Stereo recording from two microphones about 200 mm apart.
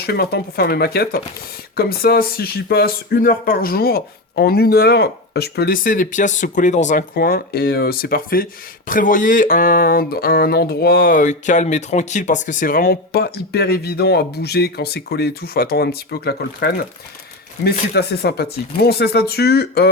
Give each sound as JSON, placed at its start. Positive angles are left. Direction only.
{"t": 0.0, "sound": "speech", "side_deg": 50}
{"t": 17.9, "sound": "speech", "side_deg": 55}